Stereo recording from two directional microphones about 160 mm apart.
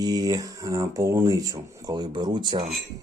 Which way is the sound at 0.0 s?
25° right (ahead or behind).